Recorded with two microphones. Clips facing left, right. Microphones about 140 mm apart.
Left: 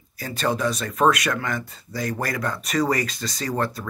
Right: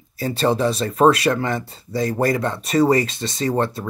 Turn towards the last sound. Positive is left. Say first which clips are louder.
# right 5 dB
turn(degrees=-25)  # may be behind; listen again after turning